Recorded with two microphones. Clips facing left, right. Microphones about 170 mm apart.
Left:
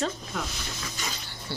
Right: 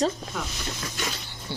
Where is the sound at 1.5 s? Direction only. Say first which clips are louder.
Right 1 dB; 15° right (ahead or behind).